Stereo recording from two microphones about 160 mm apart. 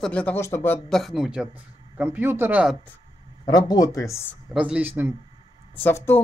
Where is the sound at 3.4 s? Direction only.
25° left (ahead or behind).